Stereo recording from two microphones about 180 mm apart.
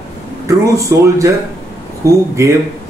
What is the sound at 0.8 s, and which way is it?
Speech, 15° right (ahead or behind).